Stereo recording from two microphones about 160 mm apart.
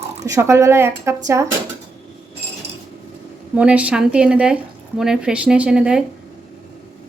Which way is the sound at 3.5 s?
5° right (ahead or behind).